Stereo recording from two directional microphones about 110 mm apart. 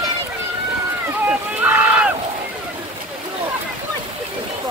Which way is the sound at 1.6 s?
15° right (ahead or behind).